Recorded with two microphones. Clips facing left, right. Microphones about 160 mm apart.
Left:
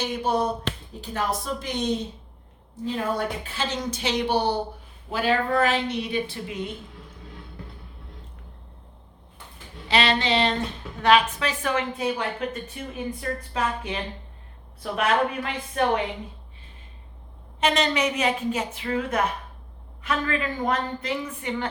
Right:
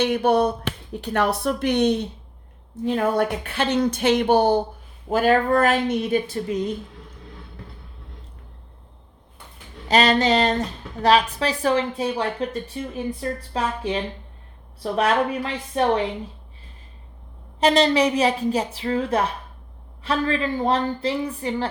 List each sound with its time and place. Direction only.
0.0 s a woman's voice: 65° right (ahead or behind); by 6.7 s 40° right (ahead or behind)
9.9 s a woman's voice: 45° right (ahead or behind)
17.6 s a woman's voice: 35° right (ahead or behind)